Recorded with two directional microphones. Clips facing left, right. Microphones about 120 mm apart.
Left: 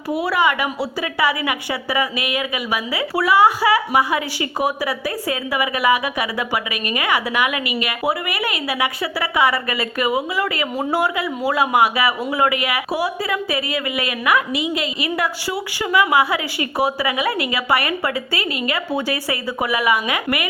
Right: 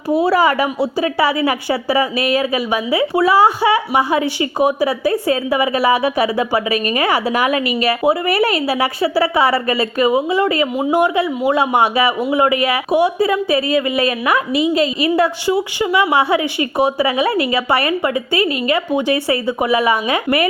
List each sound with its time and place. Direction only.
0.1 s a woman's voice: 30° right (ahead or behind)